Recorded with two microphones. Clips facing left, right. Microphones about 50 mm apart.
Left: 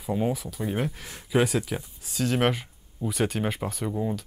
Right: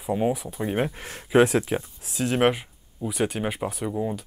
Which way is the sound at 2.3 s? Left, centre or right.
Centre.